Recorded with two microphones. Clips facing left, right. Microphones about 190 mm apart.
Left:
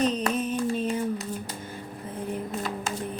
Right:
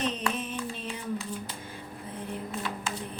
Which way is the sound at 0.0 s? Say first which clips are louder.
Left 6 dB; 40° left (ahead or behind).